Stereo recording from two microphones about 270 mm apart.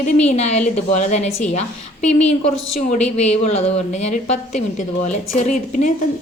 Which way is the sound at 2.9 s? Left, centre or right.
Left.